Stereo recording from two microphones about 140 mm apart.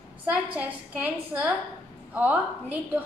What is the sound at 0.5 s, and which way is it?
A woman's voice, 10° right (ahead or behind).